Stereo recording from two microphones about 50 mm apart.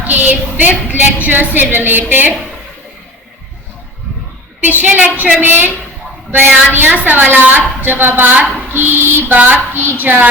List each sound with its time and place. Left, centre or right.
0.1 s a sound: right
0.9 s a woman's voice: right
4.6 s a woman's voice: right
6.7 s a woman's voice: right